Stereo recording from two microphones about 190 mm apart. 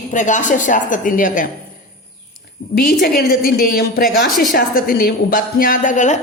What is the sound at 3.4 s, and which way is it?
A woman's voice, 50° left (ahead or behind).